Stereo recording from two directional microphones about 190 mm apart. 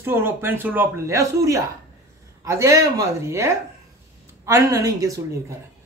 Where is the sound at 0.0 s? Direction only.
10° right (ahead or behind).